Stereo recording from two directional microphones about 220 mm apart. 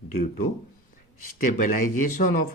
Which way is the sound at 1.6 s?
35° left (ahead or behind).